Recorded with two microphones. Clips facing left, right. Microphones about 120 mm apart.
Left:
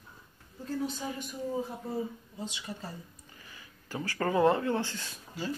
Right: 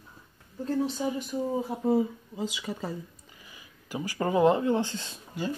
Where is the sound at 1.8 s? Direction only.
90° right.